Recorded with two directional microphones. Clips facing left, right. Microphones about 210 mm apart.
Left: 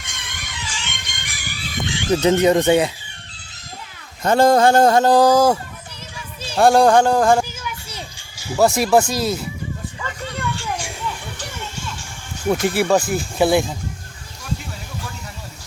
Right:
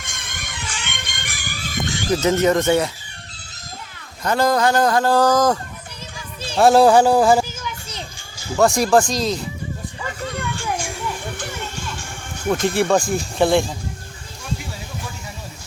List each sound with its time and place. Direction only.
0.0 s music: 50° right (ahead or behind)
2.2 s speech: 15° left (ahead or behind)
4.2 s speech: 25° left (ahead or behind); by 5.5 s 10° left (ahead or behind)
6.4 s a sound: 10° left (ahead or behind)
6.7 s speech: 5° right (ahead or behind)
7.6 s children playing: 10° left (ahead or behind)
8.4 s speech: 5° left (ahead or behind)
10.5 s children playing: 50° right (ahead or behind)
12.5 s speech: 5° left (ahead or behind)